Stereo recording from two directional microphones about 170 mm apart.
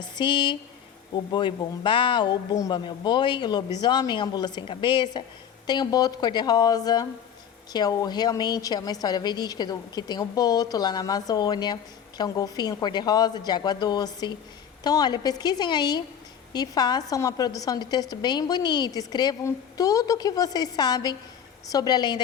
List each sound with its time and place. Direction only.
0.2 s a woman's voice: 30° left (ahead or behind)